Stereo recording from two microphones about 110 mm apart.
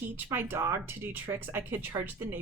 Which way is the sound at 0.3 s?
20° right (ahead or behind).